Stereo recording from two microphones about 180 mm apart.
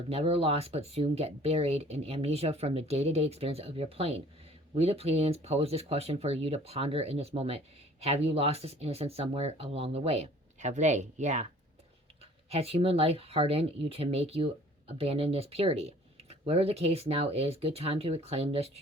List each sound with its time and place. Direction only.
0.1 s speech: 35° right (ahead or behind)